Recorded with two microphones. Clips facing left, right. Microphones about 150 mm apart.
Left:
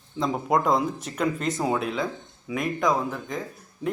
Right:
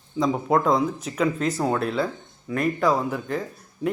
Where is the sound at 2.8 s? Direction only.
5° right (ahead or behind).